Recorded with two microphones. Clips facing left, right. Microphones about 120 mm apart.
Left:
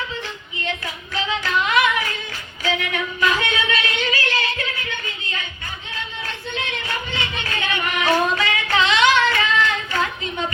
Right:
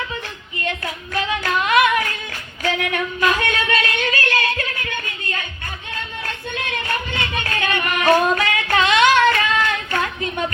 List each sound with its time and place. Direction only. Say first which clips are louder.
0.1 s female singing: right 1 dB; 55° right (ahead or behind)
2.6 s a sound: right 2 dB; 50° right (ahead or behind)
6.2 s music: right 1 dB; 55° right (ahead or behind)